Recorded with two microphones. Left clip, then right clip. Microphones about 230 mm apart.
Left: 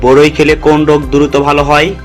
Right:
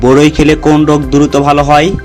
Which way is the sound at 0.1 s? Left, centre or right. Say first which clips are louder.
Left 2 dB; right.